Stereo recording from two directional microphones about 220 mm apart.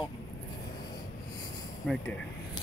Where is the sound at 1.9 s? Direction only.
5° left (ahead or behind).